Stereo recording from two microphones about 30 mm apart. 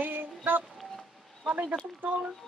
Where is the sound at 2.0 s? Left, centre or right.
Right.